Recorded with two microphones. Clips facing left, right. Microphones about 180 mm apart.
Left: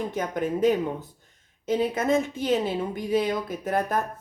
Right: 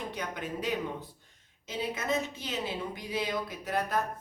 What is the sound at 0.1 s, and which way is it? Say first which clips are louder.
A woman's voice: left 9 dB; 45° left (ahead or behind).